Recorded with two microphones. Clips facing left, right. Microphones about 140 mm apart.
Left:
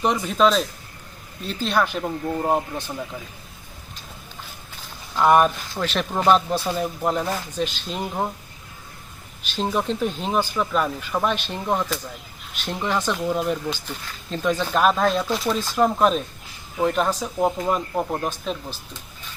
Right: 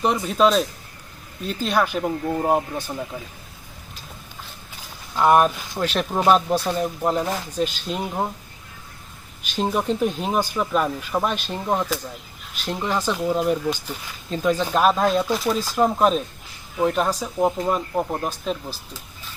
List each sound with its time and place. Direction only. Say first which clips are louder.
0.0 s speech: right 1 dB; centre (ahead or behind)
5.1 s speech: even; centre (ahead or behind)
6.6 s speech: right 1 dB; 5° left (ahead or behind)
9.6 s speech: right 2 dB; 10° right (ahead or behind)